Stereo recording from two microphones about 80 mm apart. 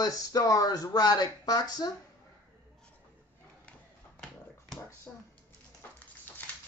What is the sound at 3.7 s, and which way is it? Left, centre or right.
Dog, centre.